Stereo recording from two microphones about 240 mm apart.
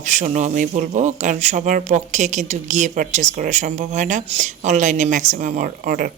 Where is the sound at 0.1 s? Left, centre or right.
Right.